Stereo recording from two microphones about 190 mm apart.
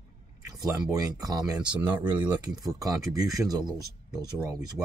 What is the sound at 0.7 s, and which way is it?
Speech, 15° right (ahead or behind).